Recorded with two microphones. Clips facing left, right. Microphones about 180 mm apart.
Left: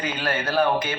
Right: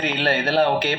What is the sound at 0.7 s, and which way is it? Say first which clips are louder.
Speech: right 3 dB; 65° right (ahead or behind).